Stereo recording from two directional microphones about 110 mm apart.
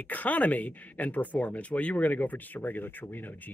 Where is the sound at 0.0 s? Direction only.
15° left (ahead or behind).